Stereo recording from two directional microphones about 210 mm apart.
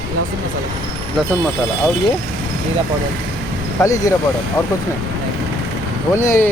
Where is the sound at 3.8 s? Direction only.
15° left (ahead or behind).